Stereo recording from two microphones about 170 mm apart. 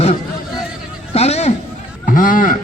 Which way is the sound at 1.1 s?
40° left (ahead or behind).